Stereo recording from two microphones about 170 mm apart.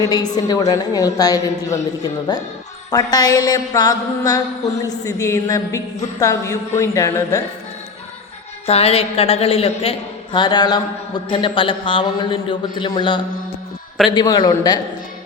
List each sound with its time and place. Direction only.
0.0 s mantra: 20° left (ahead or behind)
2.9 s mantra: 25° left (ahead or behind)
8.6 s a woman's voice: 35° left (ahead or behind)
10.3 s mantra: 25° left (ahead or behind)